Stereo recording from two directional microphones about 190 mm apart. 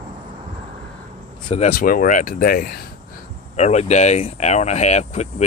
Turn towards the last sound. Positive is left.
turn(degrees=35)  # may be behind; listen again after turning